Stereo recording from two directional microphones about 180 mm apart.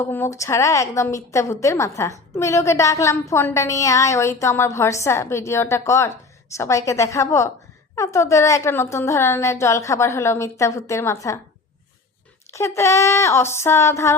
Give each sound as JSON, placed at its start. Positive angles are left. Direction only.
{"t": 0.0, "sound": "a woman's voice", "side_deg": 10}
{"t": 12.5, "sound": "a woman's voice", "side_deg": 15}